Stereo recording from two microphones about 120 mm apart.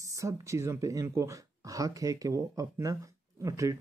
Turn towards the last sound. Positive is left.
turn(degrees=-25)  # may be behind; listen again after turning